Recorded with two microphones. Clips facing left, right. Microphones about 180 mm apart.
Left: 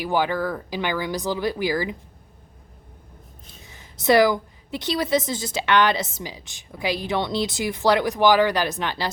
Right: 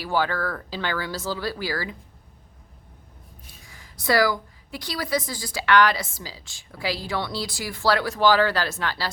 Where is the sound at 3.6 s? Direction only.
20° left (ahead or behind).